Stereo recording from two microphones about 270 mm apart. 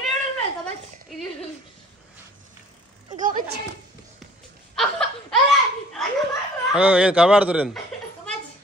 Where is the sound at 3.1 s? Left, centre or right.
Right.